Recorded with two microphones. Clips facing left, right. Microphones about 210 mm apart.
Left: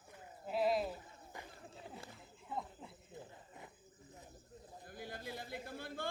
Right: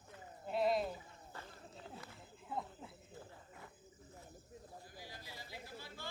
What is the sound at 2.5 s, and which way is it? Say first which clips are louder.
Speech: even; centre (ahead or behind).